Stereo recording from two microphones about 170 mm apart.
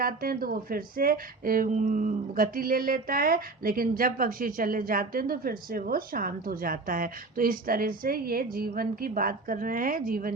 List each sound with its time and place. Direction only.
0.0 s speech: 60° right (ahead or behind)